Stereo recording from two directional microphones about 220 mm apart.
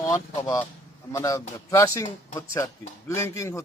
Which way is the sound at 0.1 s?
15° left (ahead or behind).